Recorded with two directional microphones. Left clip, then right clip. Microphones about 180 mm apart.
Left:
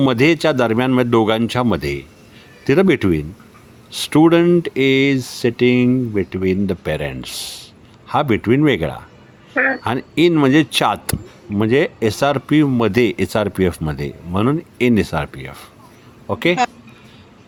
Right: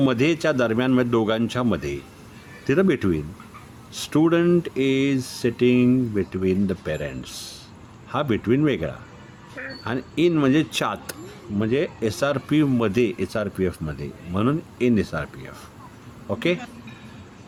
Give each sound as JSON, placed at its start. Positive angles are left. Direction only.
{"t": 0.0, "sound": "speech", "side_deg": 30}